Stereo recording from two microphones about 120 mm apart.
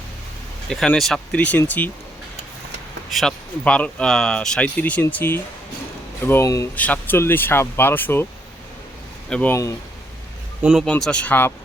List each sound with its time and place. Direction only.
0.7 s speech: centre (ahead or behind)
3.1 s speech: centre (ahead or behind)
3.6 s speech: 10° left (ahead or behind)
9.3 s speech: 15° left (ahead or behind)
10.6 s speech: 5° right (ahead or behind)
10.8 s speech: 10° left (ahead or behind)